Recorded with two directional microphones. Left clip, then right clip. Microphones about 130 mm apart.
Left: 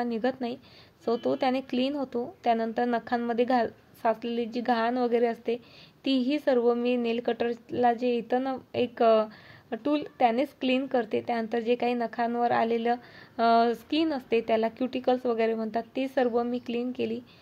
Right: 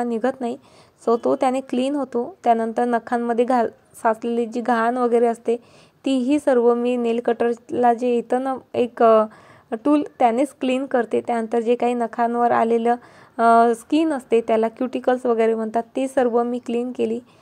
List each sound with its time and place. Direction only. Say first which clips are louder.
0.0 s speech: right 7 dB; 40° right (ahead or behind)